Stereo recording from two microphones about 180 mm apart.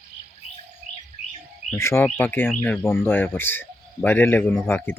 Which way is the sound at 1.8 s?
15° left (ahead or behind).